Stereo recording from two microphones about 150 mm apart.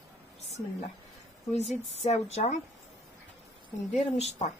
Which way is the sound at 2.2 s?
45° left (ahead or behind).